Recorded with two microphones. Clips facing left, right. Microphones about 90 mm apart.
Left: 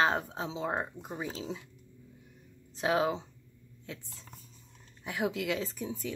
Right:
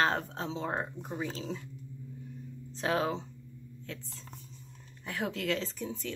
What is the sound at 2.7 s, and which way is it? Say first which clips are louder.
Speech: left 2 dB; 10° left (ahead or behind).